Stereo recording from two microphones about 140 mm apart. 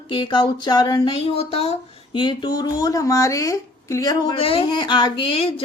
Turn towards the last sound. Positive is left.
turn(degrees=40)  # may be behind; listen again after turning